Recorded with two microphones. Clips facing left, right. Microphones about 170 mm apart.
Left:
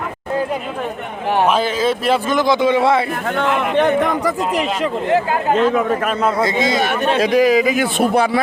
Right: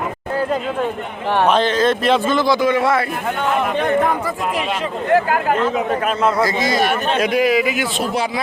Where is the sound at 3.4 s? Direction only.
75° left (ahead or behind).